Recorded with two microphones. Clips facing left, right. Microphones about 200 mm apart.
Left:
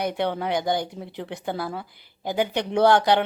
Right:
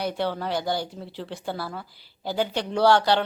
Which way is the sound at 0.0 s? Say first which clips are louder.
Left 2 dB; 20° left (ahead or behind).